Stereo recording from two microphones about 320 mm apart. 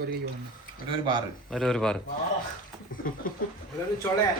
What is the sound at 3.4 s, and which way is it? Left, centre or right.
Speech, left.